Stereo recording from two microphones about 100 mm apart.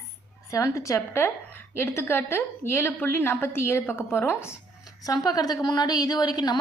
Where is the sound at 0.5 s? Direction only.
30° left (ahead or behind).